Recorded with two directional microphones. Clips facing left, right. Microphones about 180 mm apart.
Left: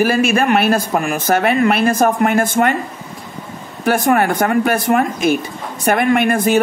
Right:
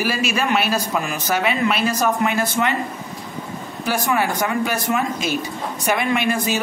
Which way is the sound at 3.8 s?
55° left (ahead or behind).